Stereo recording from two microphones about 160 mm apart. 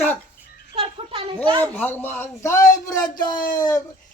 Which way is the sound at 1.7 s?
10° left (ahead or behind).